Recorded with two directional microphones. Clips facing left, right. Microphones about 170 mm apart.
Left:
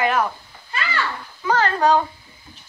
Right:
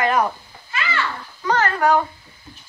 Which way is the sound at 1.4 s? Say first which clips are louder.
Even; 15° left (ahead or behind).